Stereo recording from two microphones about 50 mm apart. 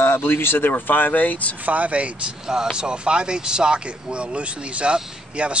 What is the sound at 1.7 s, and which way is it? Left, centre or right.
Speech, right.